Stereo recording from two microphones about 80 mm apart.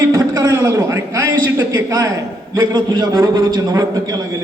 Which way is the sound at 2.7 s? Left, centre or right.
Right.